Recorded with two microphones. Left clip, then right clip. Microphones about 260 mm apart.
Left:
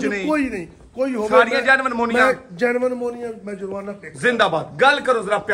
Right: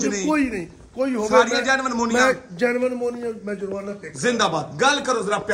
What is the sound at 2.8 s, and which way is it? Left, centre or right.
Speech, centre.